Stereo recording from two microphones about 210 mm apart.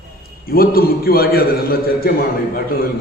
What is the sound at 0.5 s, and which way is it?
A man's voice, 45° left (ahead or behind).